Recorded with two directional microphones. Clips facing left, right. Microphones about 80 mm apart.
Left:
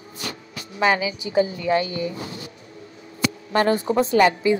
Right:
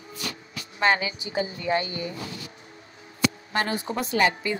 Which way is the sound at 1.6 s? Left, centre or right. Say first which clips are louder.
Left 4 dB; left.